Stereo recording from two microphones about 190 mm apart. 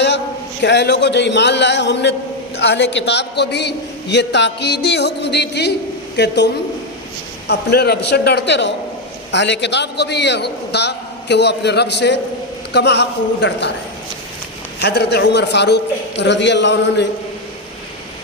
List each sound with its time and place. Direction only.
0.6 s a man's voice: 65° left (ahead or behind)
14.8 s a man's voice: 60° left (ahead or behind)